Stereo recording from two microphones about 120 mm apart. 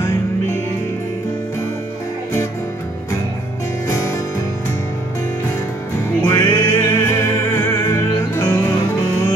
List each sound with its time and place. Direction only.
6.2 s music: 25° left (ahead or behind)